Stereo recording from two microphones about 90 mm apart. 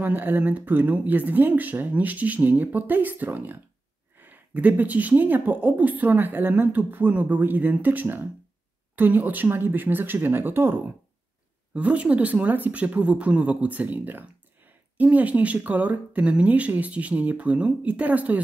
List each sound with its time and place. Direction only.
0.0 s speech: 20° right (ahead or behind)